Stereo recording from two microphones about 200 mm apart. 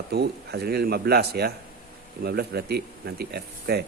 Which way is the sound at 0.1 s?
55° right (ahead or behind).